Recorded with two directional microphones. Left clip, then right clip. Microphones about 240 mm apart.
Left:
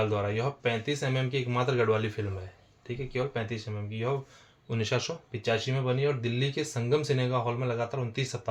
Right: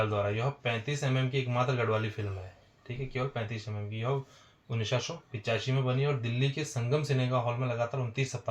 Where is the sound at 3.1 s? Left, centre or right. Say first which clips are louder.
Left 3 dB; left.